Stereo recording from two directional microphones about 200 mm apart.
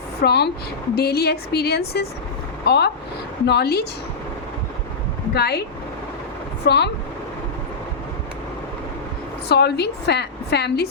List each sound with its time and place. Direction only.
0.2 s a woman's voice: 55° left (ahead or behind)
5.3 s a woman's voice: 55° left (ahead or behind)
6.7 s a woman's voice: 60° left (ahead or behind)
9.5 s a woman's voice: 55° left (ahead or behind)